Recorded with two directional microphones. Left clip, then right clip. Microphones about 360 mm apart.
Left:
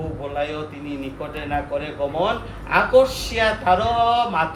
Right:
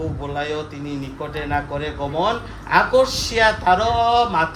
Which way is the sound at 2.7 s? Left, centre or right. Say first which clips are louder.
Even; right.